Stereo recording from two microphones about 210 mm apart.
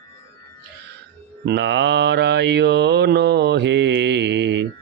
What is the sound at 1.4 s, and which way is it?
Mantra, 55° right (ahead or behind).